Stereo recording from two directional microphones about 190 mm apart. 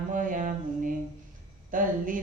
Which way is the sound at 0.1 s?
45° right (ahead or behind).